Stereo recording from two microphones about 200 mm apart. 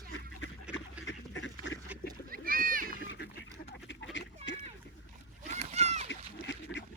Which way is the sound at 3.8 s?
65° left (ahead or behind).